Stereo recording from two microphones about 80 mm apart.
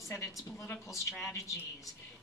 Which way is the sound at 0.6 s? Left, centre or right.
Left.